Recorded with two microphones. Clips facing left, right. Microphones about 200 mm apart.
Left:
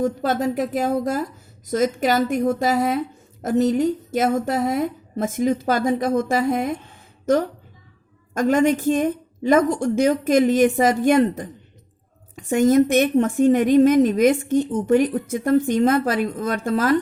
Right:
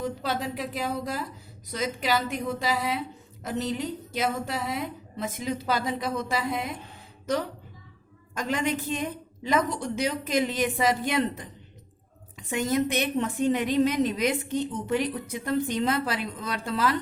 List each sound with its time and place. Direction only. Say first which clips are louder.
0.0 s a woman's voice: left 9 dB; 50° left (ahead or behind)